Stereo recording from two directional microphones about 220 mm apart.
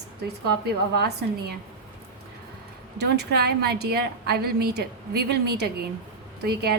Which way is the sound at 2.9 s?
50° right (ahead or behind).